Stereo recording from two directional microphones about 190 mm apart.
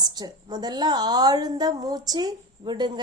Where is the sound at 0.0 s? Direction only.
20° right (ahead or behind).